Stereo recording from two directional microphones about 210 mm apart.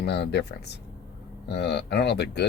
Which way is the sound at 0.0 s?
50° left (ahead or behind).